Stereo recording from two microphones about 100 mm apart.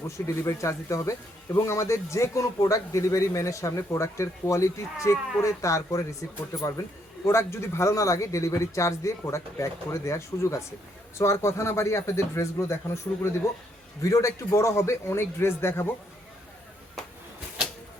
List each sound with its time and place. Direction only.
0.4 s speech: 30° left (ahead or behind)